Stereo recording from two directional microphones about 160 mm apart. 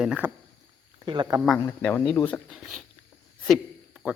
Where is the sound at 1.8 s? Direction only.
10° left (ahead or behind).